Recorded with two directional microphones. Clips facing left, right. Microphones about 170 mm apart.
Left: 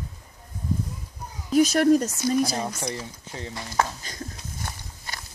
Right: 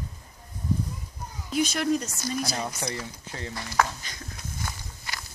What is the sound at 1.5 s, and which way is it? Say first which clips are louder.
Speech: left 7 dB; 40° left (ahead or behind).